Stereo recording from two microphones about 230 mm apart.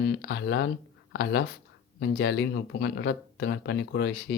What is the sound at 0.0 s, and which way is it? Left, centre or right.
Speech, left.